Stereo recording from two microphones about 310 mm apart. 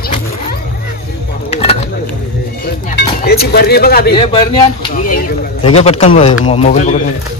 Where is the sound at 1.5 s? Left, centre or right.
Centre.